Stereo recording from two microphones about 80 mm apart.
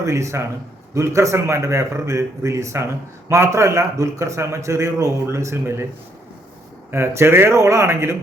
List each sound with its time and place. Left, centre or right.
0.0 s a man's voice: right
6.9 s a man's voice: right